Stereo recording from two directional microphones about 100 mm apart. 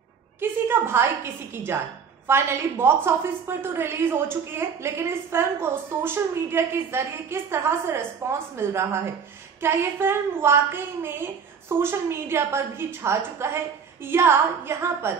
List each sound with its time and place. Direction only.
0.4 s a woman's voice: 25° right (ahead or behind)